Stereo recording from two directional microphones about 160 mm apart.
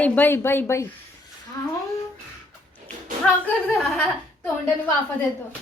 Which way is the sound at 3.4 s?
10° left (ahead or behind).